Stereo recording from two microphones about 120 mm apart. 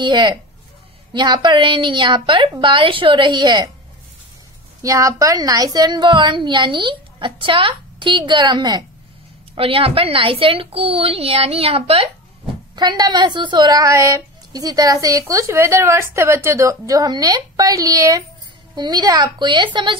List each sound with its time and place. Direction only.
0.0 s a woman's voice: 40° right (ahead or behind)
4.8 s a woman's voice: 25° right (ahead or behind)
9.6 s a woman's voice: 50° right (ahead or behind)
12.7 s a woman's voice: 35° right (ahead or behind)